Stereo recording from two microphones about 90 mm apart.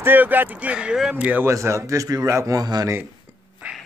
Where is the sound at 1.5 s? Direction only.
35° right (ahead or behind).